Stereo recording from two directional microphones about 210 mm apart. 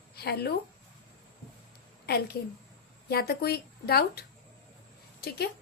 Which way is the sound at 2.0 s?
50° left (ahead or behind).